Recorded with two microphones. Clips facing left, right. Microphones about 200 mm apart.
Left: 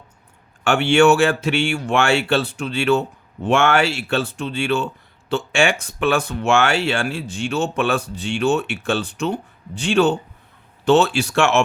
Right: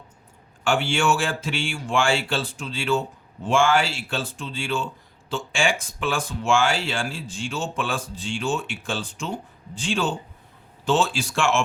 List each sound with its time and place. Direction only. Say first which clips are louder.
0.6 s speech: left 8 dB; 65° left (ahead or behind)